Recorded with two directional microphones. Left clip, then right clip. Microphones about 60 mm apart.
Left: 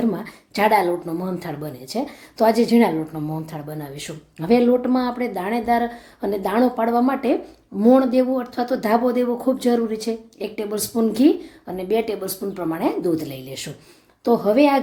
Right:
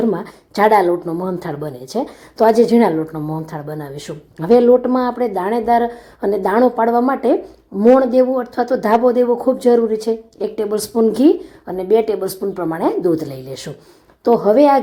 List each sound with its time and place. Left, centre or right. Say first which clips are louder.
0.0 s speech: right 6 dB; right
7.8 s speech: right 5 dB; centre
12.4 s speech: right 6 dB; centre
12.8 s speech: right 6 dB; right